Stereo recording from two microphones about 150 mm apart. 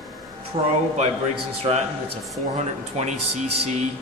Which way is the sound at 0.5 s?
35° right (ahead or behind).